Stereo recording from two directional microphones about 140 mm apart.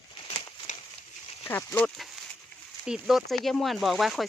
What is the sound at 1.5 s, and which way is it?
Speech, 15° left (ahead or behind).